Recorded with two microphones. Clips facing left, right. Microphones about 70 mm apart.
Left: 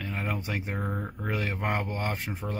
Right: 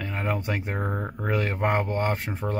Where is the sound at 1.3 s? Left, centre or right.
Right.